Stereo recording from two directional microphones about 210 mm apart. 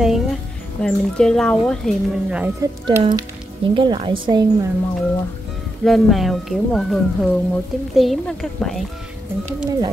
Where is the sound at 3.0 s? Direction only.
20° right (ahead or behind).